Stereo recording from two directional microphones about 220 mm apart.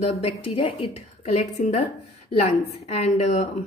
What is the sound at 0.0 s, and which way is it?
A woman's voice, 25° left (ahead or behind).